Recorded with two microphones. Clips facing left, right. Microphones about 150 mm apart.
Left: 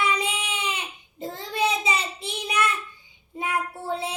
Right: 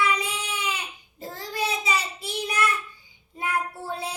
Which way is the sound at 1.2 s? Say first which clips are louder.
Left 4 dB; 25° left (ahead or behind).